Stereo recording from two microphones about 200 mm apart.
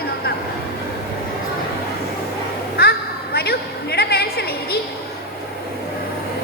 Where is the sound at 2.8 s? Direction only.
50° left (ahead or behind).